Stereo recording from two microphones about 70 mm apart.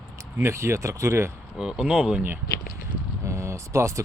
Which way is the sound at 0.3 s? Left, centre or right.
Right.